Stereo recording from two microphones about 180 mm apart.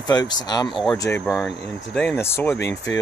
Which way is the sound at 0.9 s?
15° left (ahead or behind).